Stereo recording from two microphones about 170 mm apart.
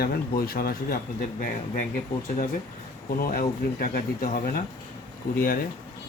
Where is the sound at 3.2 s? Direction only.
60° left (ahead or behind).